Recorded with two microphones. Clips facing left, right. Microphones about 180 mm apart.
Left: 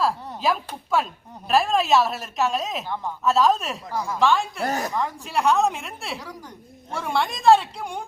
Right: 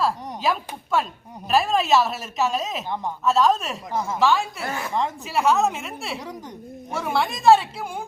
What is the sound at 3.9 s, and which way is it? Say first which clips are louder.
Speech: right 2 dB; 20° right (ahead or behind).